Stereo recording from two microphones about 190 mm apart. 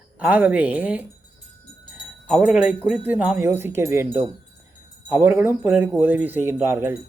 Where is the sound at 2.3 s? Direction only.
5° right (ahead or behind).